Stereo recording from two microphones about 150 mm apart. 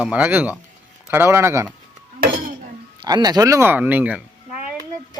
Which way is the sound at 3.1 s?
25° right (ahead or behind).